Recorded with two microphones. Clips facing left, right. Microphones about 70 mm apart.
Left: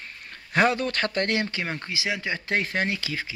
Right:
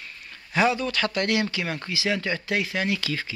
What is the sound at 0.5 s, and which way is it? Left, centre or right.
Speech, left.